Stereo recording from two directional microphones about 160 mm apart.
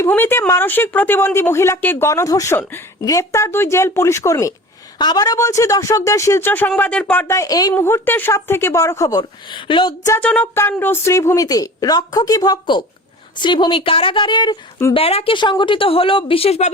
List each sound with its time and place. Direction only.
0.0 s speech: 15° left (ahead or behind); by 10.1 s 30° left (ahead or behind)
10.1 s speech: 10° left (ahead or behind); by 16.6 s 40° left (ahead or behind)